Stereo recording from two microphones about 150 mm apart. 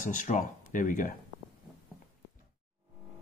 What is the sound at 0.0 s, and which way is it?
Speech, 60° left (ahead or behind).